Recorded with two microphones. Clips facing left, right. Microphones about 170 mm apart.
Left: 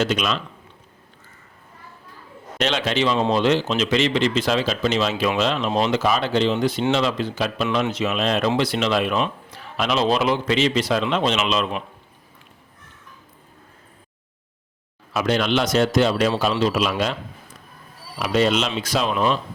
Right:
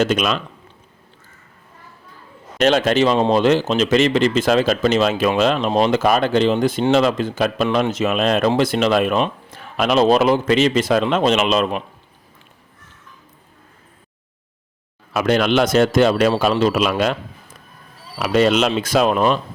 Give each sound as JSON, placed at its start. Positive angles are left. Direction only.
{"t": 0.0, "sound": "speech", "side_deg": -50}
{"t": 2.6, "sound": "speech", "side_deg": -45}
{"t": 15.1, "sound": "speech", "side_deg": -55}
{"t": 18.2, "sound": "speech", "side_deg": -55}